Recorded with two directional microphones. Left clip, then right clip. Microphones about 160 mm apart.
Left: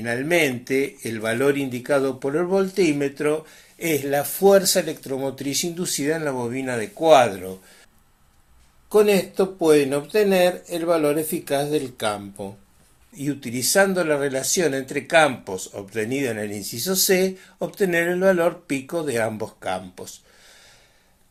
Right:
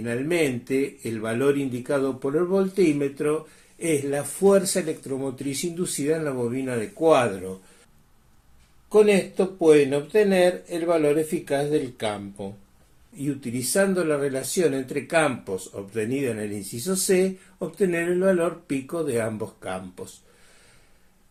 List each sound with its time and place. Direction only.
0.0 s speech: 25° left (ahead or behind)
8.9 s speech: 25° left (ahead or behind)